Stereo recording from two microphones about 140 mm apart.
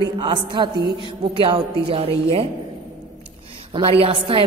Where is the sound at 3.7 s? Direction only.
40° right (ahead or behind).